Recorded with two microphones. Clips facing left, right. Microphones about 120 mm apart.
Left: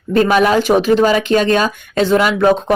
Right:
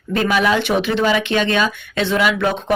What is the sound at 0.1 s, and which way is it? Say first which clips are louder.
Speech: left 5 dB; 45° left (ahead or behind).